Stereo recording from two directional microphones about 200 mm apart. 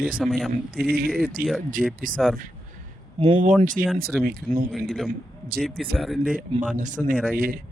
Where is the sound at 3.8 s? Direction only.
45° right (ahead or behind).